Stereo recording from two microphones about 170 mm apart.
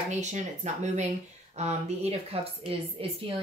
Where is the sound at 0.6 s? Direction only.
40° right (ahead or behind).